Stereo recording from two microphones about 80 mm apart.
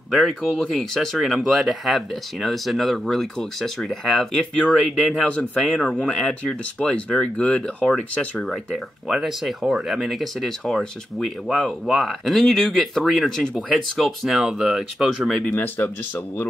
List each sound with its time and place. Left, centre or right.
0.1 s speech: centre
8.4 s speech: centre
15.4 s speech: left